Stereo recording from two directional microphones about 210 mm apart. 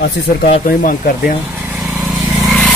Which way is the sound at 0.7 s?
45° left (ahead or behind).